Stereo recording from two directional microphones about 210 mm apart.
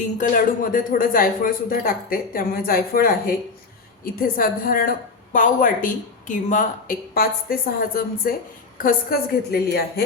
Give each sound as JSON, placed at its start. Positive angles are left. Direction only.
{"t": 0.0, "sound": "a woman's voice", "side_deg": 40}